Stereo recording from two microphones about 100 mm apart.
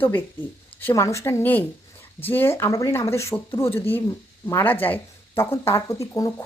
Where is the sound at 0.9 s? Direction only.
30° left (ahead or behind).